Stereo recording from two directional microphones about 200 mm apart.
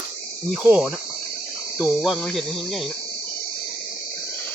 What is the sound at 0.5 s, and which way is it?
Cricket, 5° right (ahead or behind).